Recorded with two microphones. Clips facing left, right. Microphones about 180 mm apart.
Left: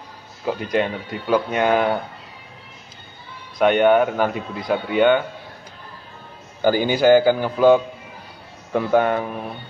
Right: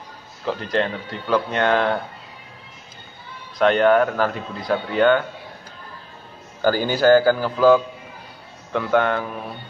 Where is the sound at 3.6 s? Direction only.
10° left (ahead or behind).